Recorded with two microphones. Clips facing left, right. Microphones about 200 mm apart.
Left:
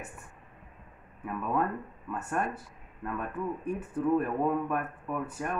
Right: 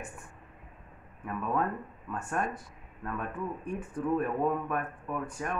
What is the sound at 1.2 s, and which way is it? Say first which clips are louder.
Speech: left 1 dB; 5° left (ahead or behind).